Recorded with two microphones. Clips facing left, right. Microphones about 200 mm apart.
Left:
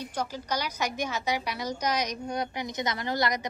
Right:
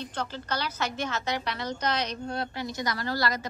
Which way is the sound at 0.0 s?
10° left (ahead or behind).